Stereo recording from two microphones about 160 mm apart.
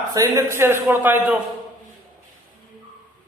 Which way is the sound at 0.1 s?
20° right (ahead or behind).